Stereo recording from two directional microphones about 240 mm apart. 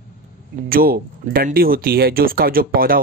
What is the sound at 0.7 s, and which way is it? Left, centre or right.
Speech, right.